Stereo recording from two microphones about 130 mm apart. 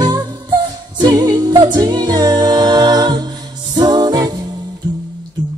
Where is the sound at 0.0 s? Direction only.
30° right (ahead or behind).